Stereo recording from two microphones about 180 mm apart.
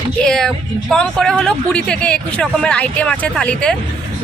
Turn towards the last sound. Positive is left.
turn(degrees=5)  # may be behind; listen again after turning